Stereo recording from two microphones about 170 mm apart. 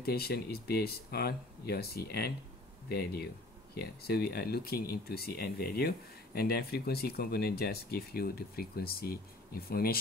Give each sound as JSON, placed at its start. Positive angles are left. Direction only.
{"t": 0.0, "sound": "speech", "side_deg": 65}